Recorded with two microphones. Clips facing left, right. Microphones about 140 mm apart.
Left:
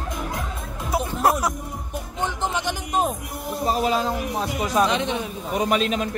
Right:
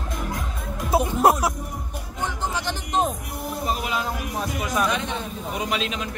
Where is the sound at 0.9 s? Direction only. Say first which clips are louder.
Right 4 dB; 25° right (ahead or behind).